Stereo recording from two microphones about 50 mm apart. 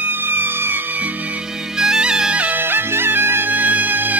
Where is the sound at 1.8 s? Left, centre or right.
Centre.